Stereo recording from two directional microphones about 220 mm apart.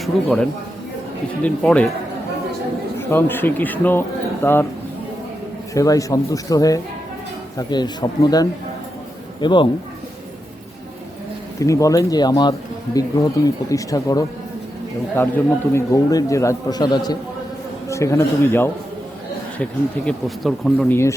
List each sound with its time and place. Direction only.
0.0 s speech: 5° left (ahead or behind)
1.5 s speech: 5° left (ahead or behind)
3.0 s a man's voice: 10° left (ahead or behind)
5.7 s a man's voice: 15° left (ahead or behind)
11.6 s a man's voice: 15° left (ahead or behind)
20.1 s speech: centre (ahead or behind)